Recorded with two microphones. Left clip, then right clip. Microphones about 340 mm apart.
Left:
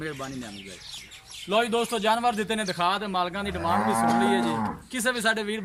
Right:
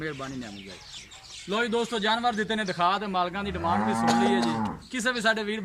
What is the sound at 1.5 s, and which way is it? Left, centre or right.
Speech, centre.